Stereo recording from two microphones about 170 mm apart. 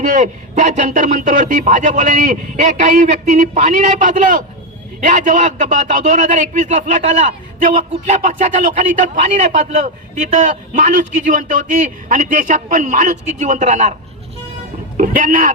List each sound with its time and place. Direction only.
0.0 s a man's voice: 45° right (ahead or behind)
14.9 s a man's voice: 50° right (ahead or behind)